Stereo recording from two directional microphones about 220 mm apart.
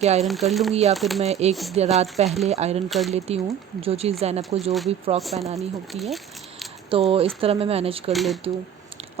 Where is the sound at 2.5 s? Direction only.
30° right (ahead or behind).